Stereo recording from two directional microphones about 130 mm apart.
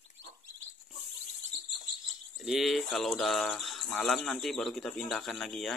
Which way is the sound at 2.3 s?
Centre (ahead or behind).